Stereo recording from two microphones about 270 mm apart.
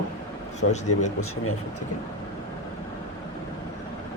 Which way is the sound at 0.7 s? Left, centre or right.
Left.